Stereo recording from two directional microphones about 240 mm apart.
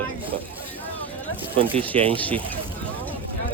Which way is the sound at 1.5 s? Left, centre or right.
Right.